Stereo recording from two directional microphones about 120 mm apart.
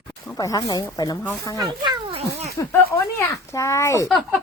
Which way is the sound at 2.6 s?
30° left (ahead or behind).